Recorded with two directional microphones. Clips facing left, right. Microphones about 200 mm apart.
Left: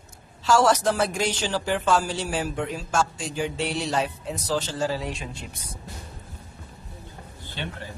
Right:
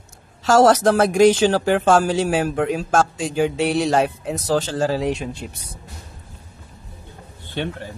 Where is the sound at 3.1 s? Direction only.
90° right.